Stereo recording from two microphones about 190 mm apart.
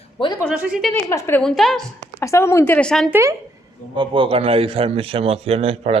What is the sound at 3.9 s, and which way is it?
A man's voice, 25° right (ahead or behind).